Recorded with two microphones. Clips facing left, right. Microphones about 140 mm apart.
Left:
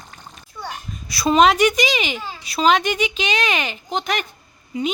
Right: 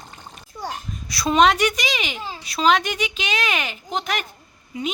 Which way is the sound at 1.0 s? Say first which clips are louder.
Left 2 dB; 5° left (ahead or behind).